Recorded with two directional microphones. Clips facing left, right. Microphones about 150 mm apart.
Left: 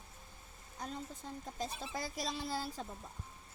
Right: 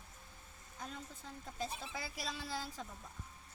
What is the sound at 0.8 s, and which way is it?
A woman's voice, 40° left (ahead or behind).